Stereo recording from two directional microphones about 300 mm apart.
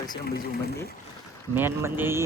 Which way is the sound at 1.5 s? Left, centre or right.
Centre.